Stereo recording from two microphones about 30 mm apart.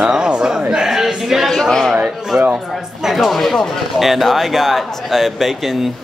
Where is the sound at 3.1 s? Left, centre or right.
Centre.